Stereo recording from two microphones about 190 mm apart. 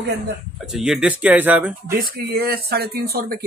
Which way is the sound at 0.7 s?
5° right (ahead or behind).